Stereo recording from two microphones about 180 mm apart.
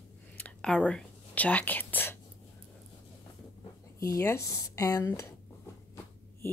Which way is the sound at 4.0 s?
15° left (ahead or behind).